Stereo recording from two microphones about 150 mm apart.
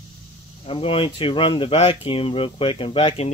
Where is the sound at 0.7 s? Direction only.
35° left (ahead or behind).